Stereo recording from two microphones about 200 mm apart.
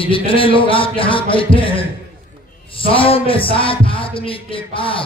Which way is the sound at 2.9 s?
25° left (ahead or behind).